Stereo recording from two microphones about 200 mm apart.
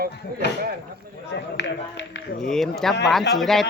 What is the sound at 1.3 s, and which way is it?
Speech, 60° left (ahead or behind).